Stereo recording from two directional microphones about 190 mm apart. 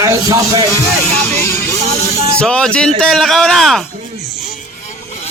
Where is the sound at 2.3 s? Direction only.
5° left (ahead or behind).